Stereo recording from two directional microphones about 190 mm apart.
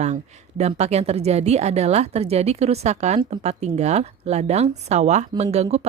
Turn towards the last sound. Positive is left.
turn(degrees=-35)  # may be behind; listen again after turning